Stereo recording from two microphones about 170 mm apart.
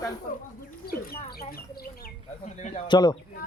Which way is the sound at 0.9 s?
60° left (ahead or behind).